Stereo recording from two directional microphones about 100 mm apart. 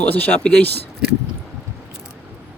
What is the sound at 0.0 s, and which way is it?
Speech, 15° left (ahead or behind).